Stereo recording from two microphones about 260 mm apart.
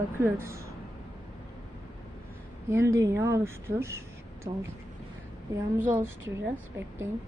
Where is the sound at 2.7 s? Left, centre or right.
Centre.